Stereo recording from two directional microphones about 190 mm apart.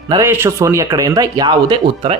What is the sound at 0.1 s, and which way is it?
Speech, 15° right (ahead or behind).